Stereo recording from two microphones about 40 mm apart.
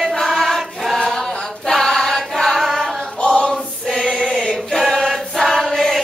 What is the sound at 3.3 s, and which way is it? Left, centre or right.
Choir, left.